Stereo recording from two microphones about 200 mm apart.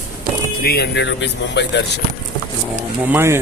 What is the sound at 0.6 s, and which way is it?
Speech, 50° left (ahead or behind).